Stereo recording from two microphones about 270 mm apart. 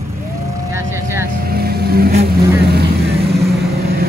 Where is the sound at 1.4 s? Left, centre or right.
Right.